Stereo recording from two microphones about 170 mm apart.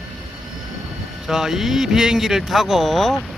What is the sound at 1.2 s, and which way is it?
Speech, centre (ahead or behind).